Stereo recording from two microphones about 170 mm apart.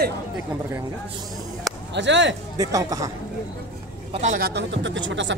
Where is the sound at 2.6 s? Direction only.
20° right (ahead or behind).